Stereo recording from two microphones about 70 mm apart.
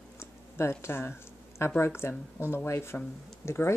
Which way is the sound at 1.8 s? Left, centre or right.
Left.